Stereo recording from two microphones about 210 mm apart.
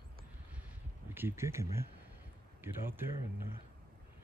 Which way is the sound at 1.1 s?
10° right (ahead or behind).